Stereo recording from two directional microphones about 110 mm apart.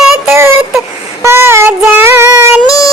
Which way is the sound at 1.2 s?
25° right (ahead or behind).